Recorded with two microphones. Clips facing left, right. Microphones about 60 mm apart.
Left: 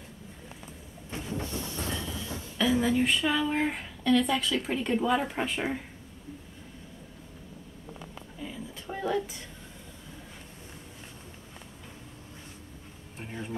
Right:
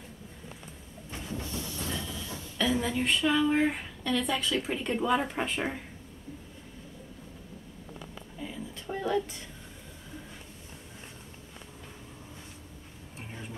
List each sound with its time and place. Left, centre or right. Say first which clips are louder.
1.3 s train: left 2 dB; left
2.0 s train: left 2 dB; centre
2.5 s speech: left 3 dB; centre
8.4 s a sound: even; centre